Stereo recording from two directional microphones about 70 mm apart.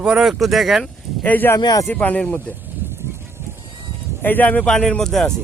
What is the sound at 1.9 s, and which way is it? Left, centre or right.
Speech, left.